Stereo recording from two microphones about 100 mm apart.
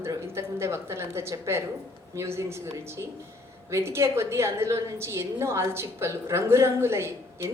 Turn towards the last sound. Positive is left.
turn(degrees=-25)  # may be behind; listen again after turning